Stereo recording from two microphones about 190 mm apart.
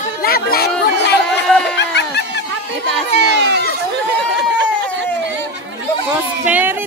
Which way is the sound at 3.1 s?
65° right (ahead or behind).